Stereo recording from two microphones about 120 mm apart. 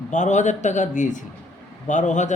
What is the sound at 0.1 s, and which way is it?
Speech, 85° left.